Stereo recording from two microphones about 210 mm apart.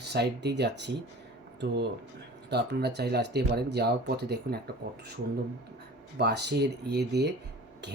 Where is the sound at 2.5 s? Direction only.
50° right (ahead or behind).